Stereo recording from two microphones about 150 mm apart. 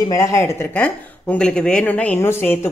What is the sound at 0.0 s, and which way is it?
Speech, 20° left (ahead or behind).